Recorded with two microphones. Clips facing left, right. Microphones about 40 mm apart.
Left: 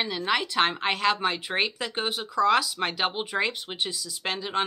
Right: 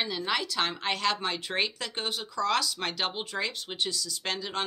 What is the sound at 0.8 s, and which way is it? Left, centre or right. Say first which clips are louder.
Speech: left 4 dB; centre.